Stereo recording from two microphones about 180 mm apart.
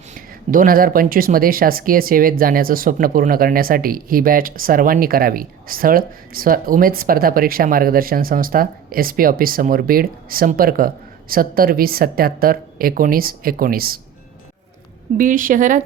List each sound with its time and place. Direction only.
0.1 s speech: 50° right (ahead or behind)
15.2 s speech: 50° right (ahead or behind)